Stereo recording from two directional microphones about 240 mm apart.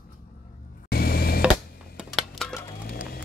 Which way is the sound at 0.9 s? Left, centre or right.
Left.